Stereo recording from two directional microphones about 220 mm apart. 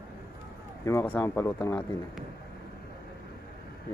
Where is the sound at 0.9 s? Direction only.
10° left (ahead or behind).